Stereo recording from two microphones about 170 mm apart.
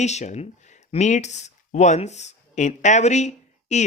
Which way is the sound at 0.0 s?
40° left (ahead or behind).